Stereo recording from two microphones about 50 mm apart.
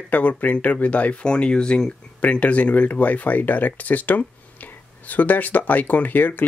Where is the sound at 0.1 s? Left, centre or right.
Left.